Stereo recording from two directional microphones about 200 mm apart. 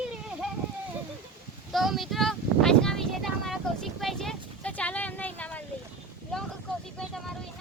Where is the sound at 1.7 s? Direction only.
Centre (ahead or behind).